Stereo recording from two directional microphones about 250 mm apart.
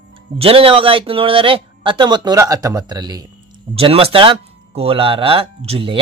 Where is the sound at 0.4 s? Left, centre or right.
Right.